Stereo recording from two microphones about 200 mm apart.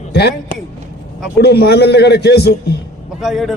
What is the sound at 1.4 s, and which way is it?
A man's voice, 55° left (ahead or behind).